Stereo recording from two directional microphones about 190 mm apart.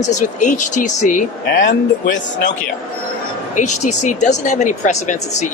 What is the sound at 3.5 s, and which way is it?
Speech, 40° left (ahead or behind).